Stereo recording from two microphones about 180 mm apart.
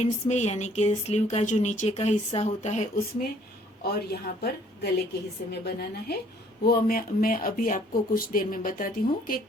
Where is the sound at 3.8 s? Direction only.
60° left (ahead or behind).